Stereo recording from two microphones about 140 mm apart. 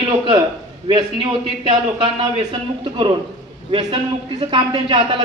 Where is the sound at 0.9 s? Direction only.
35° right (ahead or behind).